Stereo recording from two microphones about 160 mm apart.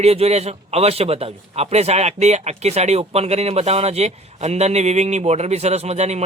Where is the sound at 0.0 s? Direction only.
40° right (ahead or behind).